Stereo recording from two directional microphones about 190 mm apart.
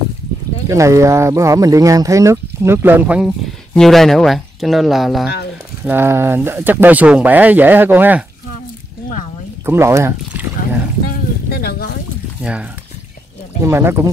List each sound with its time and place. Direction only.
0.7 s speech: 15° right (ahead or behind)
5.9 s speech: 10° right (ahead or behind)
9.7 s speech: 15° right (ahead or behind)
11.1 s a sound: 50° left (ahead or behind)
12.4 s speech: 5° right (ahead or behind)
13.7 s speech: 15° right (ahead or behind)